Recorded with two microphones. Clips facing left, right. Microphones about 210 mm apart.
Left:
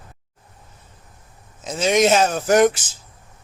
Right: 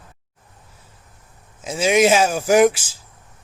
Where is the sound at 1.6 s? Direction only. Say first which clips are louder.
Right 1 dB; 5° right (ahead or behind).